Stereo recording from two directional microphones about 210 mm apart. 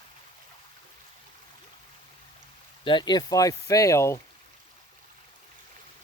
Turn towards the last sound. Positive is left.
turn(degrees=15)  # may be behind; listen again after turning